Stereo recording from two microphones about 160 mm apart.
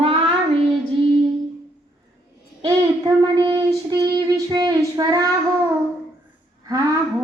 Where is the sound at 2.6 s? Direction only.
25° right (ahead or behind).